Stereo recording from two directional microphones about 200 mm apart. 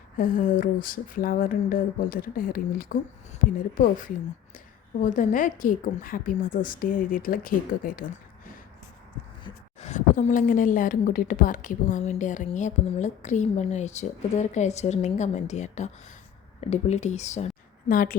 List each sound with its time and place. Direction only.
0.2 s a woman's voice: 45° left (ahead or behind)
4.9 s a woman's voice: 40° left (ahead or behind)
9.4 s a woman's voice: 35° left (ahead or behind)